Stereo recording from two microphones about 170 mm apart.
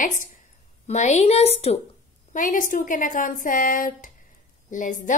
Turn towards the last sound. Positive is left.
turn(degrees=50)  # may be behind; listen again after turning